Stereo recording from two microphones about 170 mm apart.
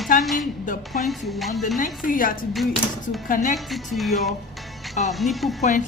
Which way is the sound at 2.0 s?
55° left (ahead or behind).